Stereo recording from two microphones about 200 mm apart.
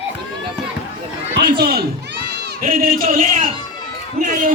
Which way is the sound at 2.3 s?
55° right (ahead or behind).